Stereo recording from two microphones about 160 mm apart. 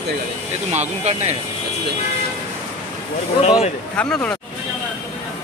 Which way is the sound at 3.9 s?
5° left (ahead or behind).